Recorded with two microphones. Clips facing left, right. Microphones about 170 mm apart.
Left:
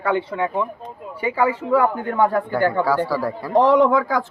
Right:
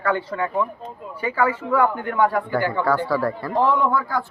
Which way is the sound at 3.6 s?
85° left.